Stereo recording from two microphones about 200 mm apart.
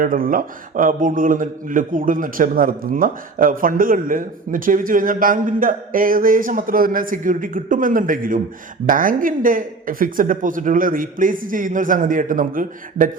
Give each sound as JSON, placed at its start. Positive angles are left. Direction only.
{"t": 0.0, "sound": "a man's voice", "side_deg": -45}